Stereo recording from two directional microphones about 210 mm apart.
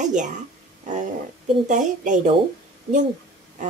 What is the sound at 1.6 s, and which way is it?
Speech, 35° right (ahead or behind).